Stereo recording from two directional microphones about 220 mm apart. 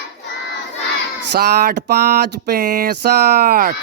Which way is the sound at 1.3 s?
45° right (ahead or behind).